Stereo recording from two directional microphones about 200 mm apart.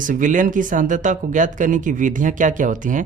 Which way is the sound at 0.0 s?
40° right (ahead or behind).